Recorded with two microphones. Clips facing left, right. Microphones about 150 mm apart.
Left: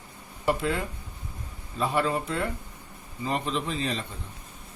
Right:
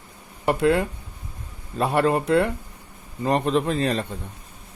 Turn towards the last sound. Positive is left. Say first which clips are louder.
# right 8 dB
turn(degrees=-60)  # may be behind; listen again after turning